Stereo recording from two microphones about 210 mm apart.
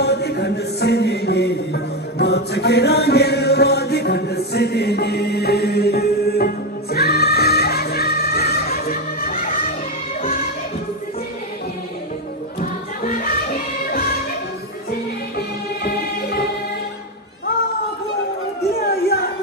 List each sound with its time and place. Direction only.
0.0 s music: 50° left (ahead or behind)
12.5 s music: 40° left (ahead or behind)
18.8 s a sound: 50° left (ahead or behind)